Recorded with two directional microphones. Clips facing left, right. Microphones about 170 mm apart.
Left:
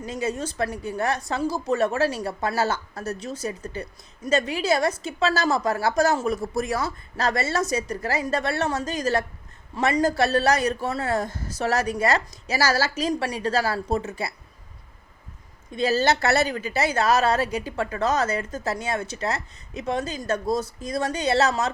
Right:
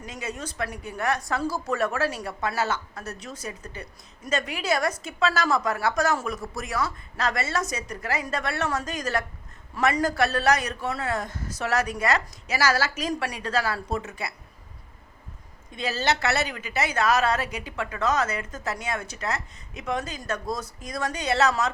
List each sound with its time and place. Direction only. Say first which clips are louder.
0.0 s a woman's voice: left 7 dB; 30° left (ahead or behind)
1.4 s a woman's voice: left 3 dB; 20° left (ahead or behind)
15.7 s a woman's voice: left 5 dB; 35° left (ahead or behind)